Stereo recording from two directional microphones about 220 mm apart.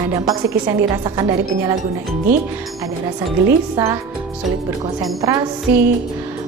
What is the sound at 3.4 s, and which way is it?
Speech, 10° right (ahead or behind).